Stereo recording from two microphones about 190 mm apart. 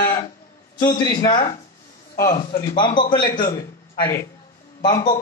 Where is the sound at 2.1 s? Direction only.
50° left (ahead or behind).